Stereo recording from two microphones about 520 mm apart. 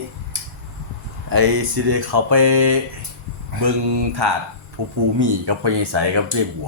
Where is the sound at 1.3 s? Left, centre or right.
Right.